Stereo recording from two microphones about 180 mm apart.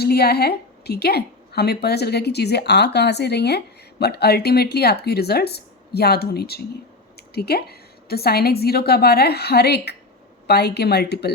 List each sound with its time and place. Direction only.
0.0 s a woman's voice: 60° left (ahead or behind)